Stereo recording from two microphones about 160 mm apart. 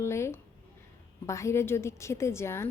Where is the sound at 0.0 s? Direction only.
15° left (ahead or behind).